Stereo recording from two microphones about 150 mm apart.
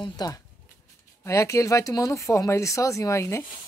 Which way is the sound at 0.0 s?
25° left (ahead or behind).